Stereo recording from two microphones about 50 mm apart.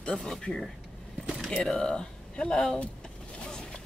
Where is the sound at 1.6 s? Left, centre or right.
Centre.